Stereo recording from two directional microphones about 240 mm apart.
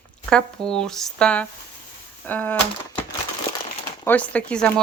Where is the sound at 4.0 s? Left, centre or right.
Centre.